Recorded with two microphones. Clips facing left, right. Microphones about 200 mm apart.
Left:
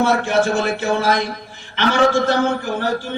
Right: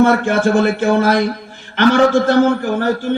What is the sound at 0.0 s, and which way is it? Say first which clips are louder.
Speech: right 4 dB; 55° right (ahead or behind).